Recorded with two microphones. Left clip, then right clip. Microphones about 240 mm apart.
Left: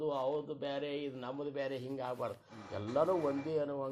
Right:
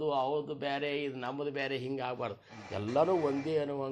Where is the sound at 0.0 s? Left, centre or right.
Right.